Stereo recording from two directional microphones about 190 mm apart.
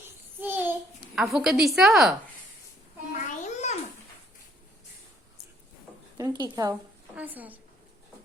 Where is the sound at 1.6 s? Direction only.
Centre (ahead or behind).